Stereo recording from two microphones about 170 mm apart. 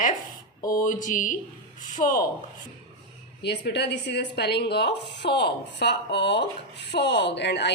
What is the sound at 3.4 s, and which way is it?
Speech, 80° left.